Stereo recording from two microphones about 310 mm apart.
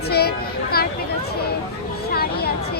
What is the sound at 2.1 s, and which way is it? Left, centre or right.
Speech, left.